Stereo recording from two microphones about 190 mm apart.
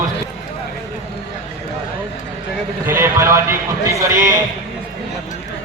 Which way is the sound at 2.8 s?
15° right (ahead or behind).